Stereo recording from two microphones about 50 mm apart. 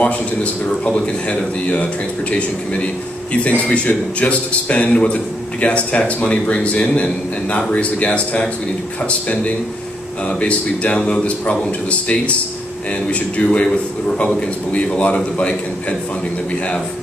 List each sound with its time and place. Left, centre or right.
0.0 s a man's voice: left
10.4 s a man's voice: left
13.1 s a man's voice: left